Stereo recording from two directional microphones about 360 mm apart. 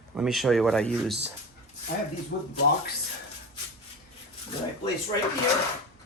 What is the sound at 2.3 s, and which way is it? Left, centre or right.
Speech, left.